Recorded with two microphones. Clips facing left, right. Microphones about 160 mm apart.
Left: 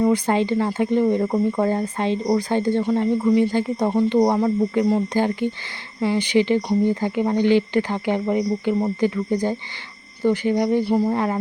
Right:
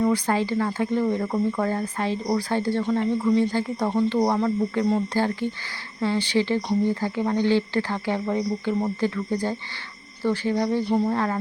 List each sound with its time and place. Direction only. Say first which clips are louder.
0.0 s speech: left 3 dB; 20° left (ahead or behind)